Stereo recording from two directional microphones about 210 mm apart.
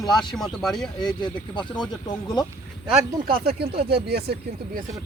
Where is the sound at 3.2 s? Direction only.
45° right (ahead or behind).